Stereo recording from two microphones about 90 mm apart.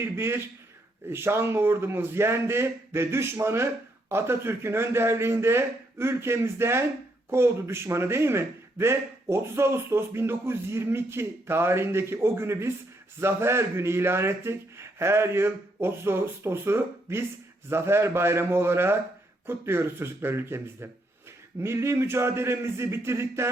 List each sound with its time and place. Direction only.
0.0 s a man's voice: 25° right (ahead or behind)